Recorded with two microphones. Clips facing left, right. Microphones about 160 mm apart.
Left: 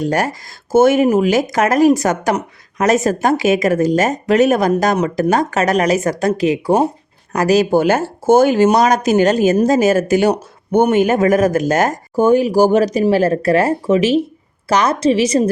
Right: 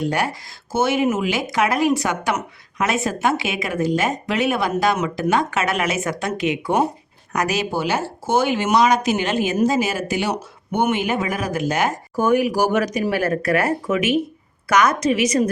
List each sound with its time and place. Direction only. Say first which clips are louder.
0.0 s speech: left 4 dB; 45° left (ahead or behind)
12.1 s a woman's voice: left 6 dB; 30° left (ahead or behind)